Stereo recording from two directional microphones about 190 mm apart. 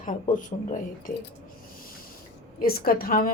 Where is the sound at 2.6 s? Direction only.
50° left (ahead or behind).